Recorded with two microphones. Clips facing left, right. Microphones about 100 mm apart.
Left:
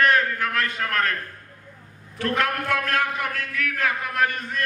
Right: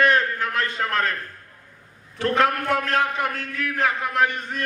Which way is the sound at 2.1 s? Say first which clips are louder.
Right 4 dB; 30° right (ahead or behind).